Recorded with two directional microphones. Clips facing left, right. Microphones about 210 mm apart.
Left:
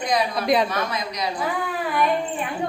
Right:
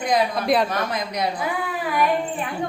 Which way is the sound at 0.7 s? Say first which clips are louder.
Right 1 dB; 55° right (ahead or behind).